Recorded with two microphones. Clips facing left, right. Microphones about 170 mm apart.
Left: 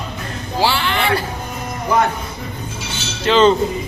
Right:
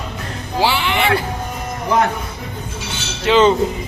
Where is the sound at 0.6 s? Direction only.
15° right (ahead or behind).